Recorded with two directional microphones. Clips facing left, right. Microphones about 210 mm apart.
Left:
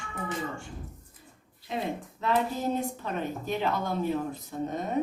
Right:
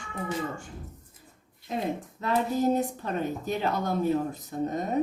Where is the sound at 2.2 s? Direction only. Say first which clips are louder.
Right 3 dB; 45° right (ahead or behind).